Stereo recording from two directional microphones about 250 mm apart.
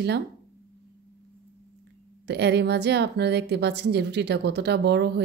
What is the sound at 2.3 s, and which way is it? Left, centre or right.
A woman's voice, right.